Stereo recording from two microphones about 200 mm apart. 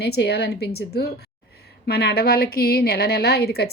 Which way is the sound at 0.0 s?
55° left (ahead or behind).